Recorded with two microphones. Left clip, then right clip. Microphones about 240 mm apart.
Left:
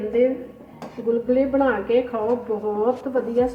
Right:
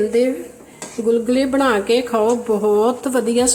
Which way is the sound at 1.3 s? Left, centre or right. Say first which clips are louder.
Right 3 dB; right.